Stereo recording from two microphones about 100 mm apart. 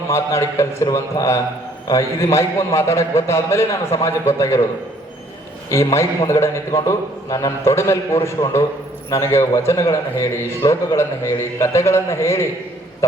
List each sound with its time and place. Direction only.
0.1 s a man's voice: 30° left (ahead or behind)
5.6 s a man's voice: 30° left (ahead or behind)